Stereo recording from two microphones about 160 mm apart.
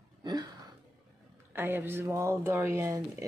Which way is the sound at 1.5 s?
15° right (ahead or behind).